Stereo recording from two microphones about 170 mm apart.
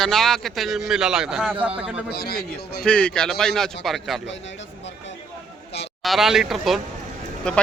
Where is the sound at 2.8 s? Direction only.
5° left (ahead or behind).